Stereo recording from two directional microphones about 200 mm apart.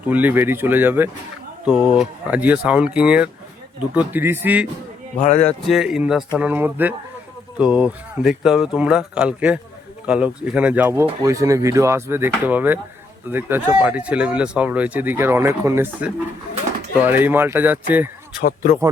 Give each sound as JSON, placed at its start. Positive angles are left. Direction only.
{"t": 0.0, "sound": "speech", "side_deg": -10}
{"t": 5.4, "sound": "speech", "side_deg": 5}
{"t": 18.3, "sound": "speech", "side_deg": 50}